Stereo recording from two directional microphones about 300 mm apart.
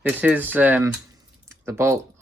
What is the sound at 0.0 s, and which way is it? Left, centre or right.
Mechanisms, centre.